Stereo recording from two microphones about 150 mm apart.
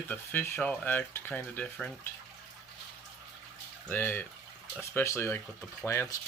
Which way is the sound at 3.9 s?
15° left (ahead or behind).